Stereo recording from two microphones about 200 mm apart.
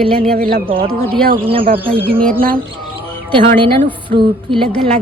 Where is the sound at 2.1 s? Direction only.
5° left (ahead or behind).